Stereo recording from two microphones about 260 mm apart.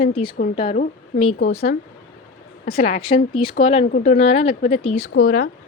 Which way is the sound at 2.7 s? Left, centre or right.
Left.